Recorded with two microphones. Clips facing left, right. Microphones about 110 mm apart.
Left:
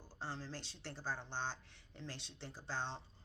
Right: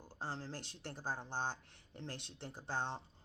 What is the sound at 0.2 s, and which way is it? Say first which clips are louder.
Speech: right 2 dB; 50° right (ahead or behind).